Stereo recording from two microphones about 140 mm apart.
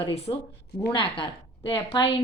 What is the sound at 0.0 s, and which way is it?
A woman's voice, 45° left (ahead or behind).